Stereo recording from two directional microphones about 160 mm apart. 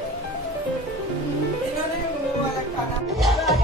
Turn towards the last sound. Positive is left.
turn(degrees=0)  # may be behind; listen again after turning